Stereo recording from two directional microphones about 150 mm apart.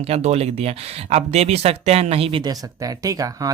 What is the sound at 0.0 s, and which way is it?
Speech, 45° right (ahead or behind).